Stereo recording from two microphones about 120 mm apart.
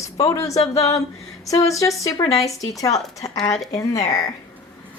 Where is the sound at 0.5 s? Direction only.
60° left (ahead or behind).